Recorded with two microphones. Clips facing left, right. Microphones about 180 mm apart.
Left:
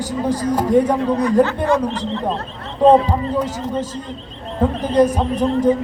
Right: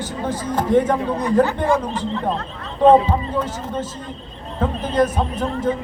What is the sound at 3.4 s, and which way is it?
A man's voice, 10° left (ahead or behind).